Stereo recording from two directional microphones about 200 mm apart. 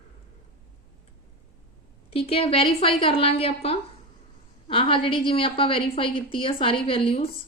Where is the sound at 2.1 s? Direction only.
30° left (ahead or behind).